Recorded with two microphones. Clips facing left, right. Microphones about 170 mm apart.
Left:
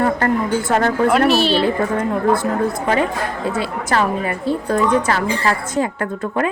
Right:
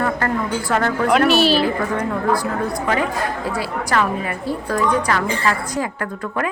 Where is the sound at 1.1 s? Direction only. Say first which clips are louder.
Right 4 dB; centre (ahead or behind).